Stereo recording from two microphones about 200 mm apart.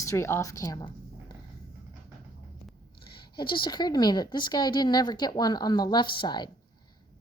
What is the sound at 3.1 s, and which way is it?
A woman's voice, 25° left (ahead or behind).